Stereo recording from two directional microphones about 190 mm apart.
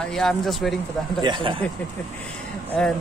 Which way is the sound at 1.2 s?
25° right (ahead or behind).